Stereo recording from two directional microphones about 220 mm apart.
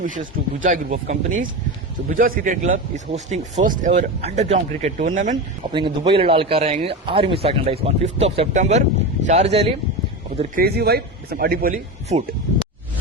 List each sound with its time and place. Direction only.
0.0 s speech: 35° right (ahead or behind)
5.7 s speech: 25° right (ahead or behind)
10.3 s speech: 40° right (ahead or behind)